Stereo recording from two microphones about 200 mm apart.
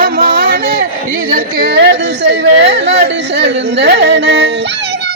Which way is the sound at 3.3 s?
60° right (ahead or behind).